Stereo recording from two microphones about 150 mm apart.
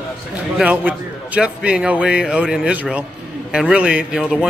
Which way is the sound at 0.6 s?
10° right (ahead or behind).